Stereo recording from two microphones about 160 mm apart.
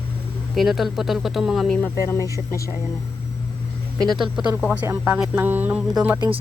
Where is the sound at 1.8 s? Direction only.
15° left (ahead or behind).